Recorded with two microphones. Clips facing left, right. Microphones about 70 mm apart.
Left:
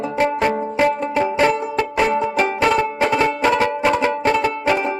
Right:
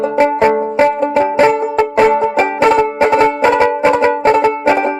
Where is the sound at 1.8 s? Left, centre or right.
Right.